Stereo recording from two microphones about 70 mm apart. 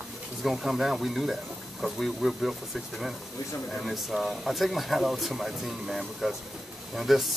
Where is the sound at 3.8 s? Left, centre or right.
Centre.